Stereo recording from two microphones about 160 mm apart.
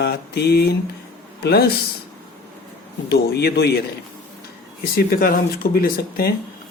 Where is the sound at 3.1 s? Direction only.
90° left.